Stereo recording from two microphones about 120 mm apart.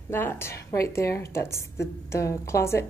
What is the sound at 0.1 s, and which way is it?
Speech, 20° left (ahead or behind).